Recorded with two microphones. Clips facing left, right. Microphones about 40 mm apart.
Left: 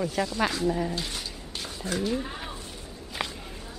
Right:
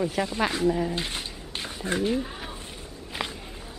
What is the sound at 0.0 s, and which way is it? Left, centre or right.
Speech, centre.